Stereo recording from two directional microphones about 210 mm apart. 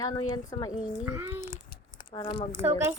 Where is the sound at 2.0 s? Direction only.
25° left (ahead or behind).